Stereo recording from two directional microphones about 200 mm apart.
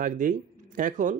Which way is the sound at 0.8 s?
40° right (ahead or behind).